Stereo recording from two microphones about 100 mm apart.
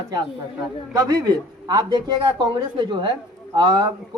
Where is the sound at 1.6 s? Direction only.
40° right (ahead or behind).